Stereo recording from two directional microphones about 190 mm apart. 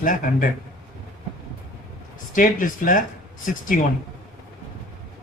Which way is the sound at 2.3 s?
45° left (ahead or behind).